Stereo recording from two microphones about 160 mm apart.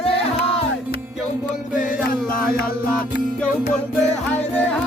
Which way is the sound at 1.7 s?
55° left (ahead or behind).